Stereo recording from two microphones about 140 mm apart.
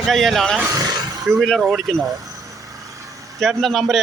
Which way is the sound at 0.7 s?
30° right (ahead or behind).